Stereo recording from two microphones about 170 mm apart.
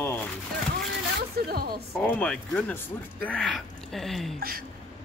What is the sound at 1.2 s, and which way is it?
Speech, 65° right (ahead or behind).